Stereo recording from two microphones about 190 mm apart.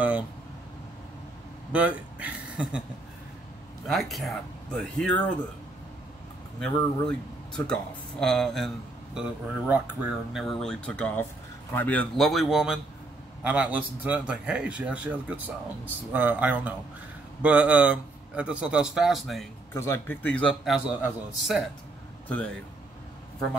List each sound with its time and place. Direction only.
1.7 s speech: 5° right (ahead or behind)
3.8 s speech: centre (ahead or behind)
6.6 s a man's voice: 5° left (ahead or behind)
19.7 s speech: 15° left (ahead or behind); by 21.6 s centre (ahead or behind)